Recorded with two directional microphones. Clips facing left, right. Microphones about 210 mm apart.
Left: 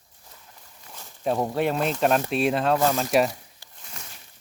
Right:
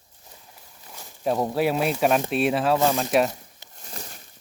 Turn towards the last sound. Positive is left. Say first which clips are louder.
# right 5 dB
turn(degrees=-40)  # may be behind; listen again after turning